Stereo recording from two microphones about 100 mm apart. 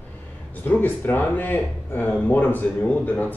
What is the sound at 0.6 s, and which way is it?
Speech, 20° left (ahead or behind).